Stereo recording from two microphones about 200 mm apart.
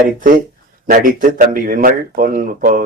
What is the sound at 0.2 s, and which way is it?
A man's voice, 45° right (ahead or behind).